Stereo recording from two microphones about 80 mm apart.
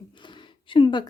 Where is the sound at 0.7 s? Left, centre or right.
Left.